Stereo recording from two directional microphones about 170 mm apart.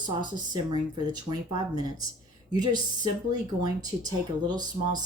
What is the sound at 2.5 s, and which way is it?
Speech, 25° right (ahead or behind).